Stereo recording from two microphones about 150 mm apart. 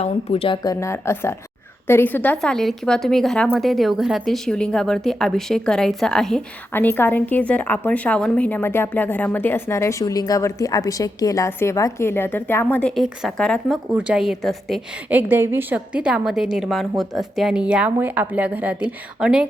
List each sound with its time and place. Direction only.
0.0 s a woman's voice: 40° left (ahead or behind); by 6.4 s 5° left (ahead or behind)
6.7 s a woman's voice: 15° left (ahead or behind)
13.9 s a woman's voice: 5° right (ahead or behind)
15.1 s speech: 15° right (ahead or behind)